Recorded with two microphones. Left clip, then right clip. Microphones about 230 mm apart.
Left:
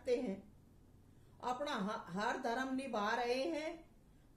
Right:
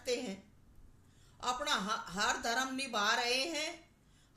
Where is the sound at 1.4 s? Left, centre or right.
Centre.